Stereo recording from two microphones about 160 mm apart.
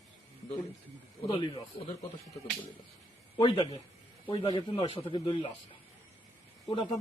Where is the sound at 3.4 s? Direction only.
30° left (ahead or behind).